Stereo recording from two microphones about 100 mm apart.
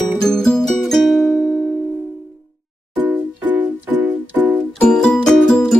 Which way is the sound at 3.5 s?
15° right (ahead or behind).